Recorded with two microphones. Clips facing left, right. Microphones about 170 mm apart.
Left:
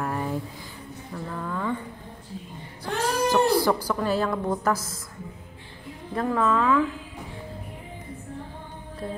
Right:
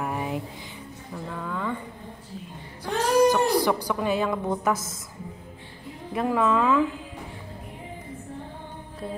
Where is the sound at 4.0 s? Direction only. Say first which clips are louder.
Even; 15° right (ahead or behind).